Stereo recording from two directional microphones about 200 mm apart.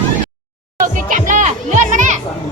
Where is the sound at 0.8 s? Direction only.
40° right (ahead or behind).